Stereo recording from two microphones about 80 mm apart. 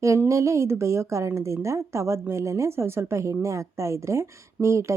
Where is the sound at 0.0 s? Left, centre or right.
Right.